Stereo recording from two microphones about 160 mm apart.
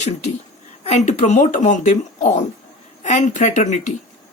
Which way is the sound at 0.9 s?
45° left (ahead or behind).